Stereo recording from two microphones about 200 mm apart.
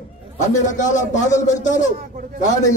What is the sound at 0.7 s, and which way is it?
Speech, 35° left (ahead or behind).